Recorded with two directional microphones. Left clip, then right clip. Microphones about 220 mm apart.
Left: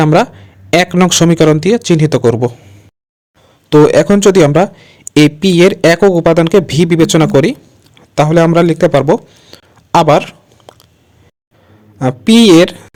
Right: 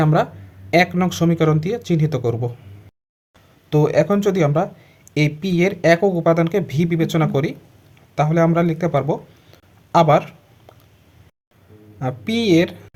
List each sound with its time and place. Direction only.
0.0 s speech: 40° left (ahead or behind)
3.7 s a man's voice: 40° left (ahead or behind)
11.9 s speech: 35° left (ahead or behind)